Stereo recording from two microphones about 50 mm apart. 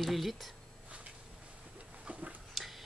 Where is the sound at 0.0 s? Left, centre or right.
Centre.